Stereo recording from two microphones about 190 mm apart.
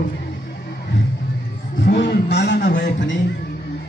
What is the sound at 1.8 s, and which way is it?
A man's voice, 65° left (ahead or behind).